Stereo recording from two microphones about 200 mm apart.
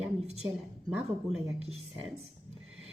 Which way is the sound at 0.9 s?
10° right (ahead or behind).